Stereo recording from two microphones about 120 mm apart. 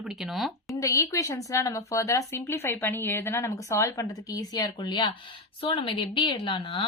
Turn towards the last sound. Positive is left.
turn(degrees=40)  # may be behind; listen again after turning